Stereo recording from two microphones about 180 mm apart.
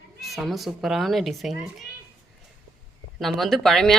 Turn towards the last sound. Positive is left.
turn(degrees=0)  # may be behind; listen again after turning